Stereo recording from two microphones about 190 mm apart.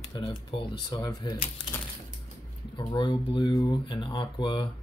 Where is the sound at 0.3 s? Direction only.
25° left (ahead or behind).